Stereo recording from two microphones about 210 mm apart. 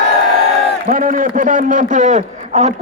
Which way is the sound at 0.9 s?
40° right (ahead or behind).